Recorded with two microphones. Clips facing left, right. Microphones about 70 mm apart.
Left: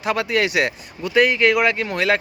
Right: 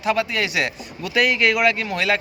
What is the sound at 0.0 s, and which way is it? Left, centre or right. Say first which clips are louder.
Speech: left 1 dB; left.